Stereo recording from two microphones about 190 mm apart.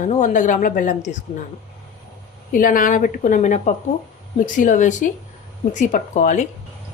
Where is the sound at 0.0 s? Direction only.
40° left (ahead or behind).